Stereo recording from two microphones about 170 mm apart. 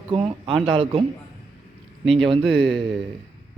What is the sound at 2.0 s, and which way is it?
A man's voice, centre (ahead or behind).